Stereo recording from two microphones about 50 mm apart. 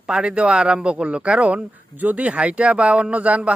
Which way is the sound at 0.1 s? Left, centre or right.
Right.